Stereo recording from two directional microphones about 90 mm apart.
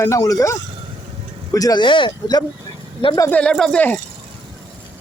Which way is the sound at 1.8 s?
60° left (ahead or behind).